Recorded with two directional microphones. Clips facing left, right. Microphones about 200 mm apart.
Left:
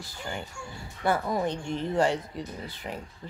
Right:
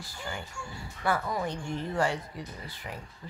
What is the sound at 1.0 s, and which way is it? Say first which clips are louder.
Speech: left 3 dB; 25° left (ahead or behind).